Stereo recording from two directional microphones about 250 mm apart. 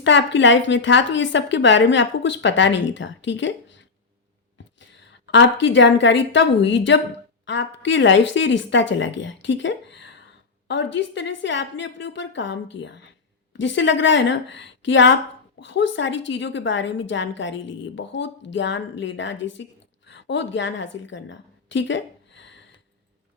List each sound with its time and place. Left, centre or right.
0.0 s a woman's voice: left